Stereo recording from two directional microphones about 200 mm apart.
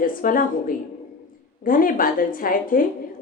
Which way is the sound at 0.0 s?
45° left (ahead or behind).